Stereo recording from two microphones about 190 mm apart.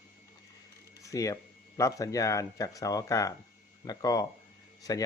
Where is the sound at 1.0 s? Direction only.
15° left (ahead or behind).